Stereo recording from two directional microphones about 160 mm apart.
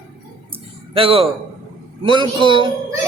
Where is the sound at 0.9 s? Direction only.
35° right (ahead or behind).